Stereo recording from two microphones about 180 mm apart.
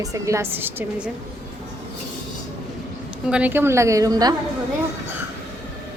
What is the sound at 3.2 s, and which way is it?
Speech, 5° right (ahead or behind).